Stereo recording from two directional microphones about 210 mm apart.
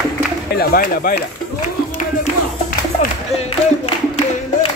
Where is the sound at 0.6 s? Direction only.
45° left (ahead or behind).